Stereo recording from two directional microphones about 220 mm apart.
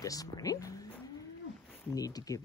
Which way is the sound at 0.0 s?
15° left (ahead or behind).